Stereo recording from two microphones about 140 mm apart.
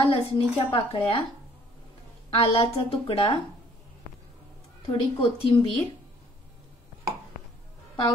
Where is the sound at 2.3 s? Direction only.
45° left (ahead or behind).